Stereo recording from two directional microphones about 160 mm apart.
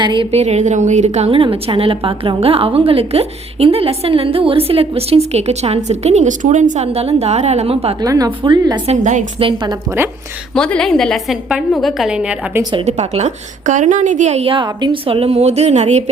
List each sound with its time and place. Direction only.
0.0 s speech: 30° right (ahead or behind)
0.3 s a woman's voice: 45° right (ahead or behind)
8.0 s speech: 20° right (ahead or behind)
8.9 s a woman's voice: 50° right (ahead or behind)
9.4 s a woman's voice: 30° right (ahead or behind)
10.5 s a woman's voice: 5° left (ahead or behind)
12.7 s a woman's voice: 40° right (ahead or behind)